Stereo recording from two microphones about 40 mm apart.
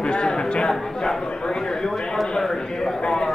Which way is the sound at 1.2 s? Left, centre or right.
Centre.